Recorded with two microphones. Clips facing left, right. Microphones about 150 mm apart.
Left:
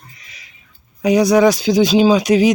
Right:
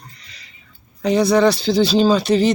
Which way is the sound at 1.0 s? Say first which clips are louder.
Left 3 dB; 15° left (ahead or behind).